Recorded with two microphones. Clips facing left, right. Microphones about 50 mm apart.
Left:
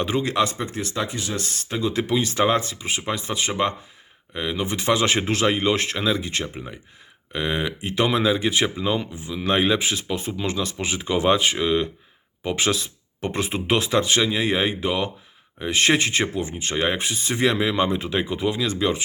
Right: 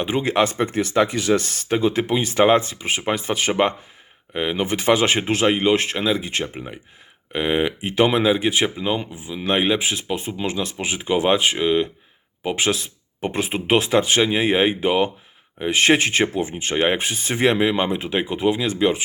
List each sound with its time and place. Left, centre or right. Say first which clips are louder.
0.0 s speech: right 2 dB; right
1.1 s speech: right 10 dB; right
1.4 s speech: right 5 dB; right
4.4 s speech: right 4 dB; right